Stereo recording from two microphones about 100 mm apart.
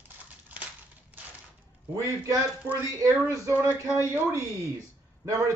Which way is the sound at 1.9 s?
35° right (ahead or behind).